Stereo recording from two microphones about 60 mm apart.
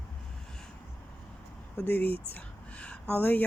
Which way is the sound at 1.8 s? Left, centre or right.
Left.